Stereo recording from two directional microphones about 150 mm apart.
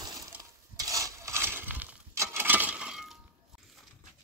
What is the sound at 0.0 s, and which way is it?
Stir, 25° right (ahead or behind).